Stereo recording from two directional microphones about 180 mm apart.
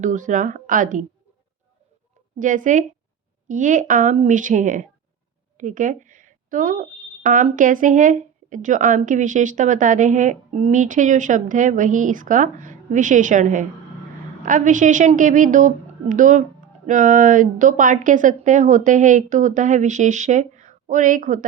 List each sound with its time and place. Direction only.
0.0 s speech: 45° right (ahead or behind)
2.4 s speech: 45° right (ahead or behind)